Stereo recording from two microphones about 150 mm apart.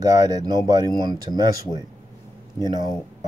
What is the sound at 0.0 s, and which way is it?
Speech, 20° right (ahead or behind).